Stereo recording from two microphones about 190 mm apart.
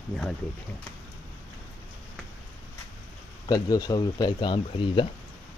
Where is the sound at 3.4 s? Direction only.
20° left (ahead or behind).